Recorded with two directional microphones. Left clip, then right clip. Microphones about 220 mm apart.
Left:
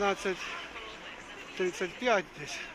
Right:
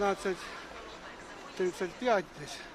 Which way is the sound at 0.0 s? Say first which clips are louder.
Left 1 dB; centre (ahead or behind).